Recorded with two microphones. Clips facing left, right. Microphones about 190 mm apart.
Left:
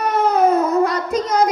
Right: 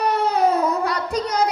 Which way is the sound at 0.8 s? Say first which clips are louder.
Left 4 dB; 35° right (ahead or behind).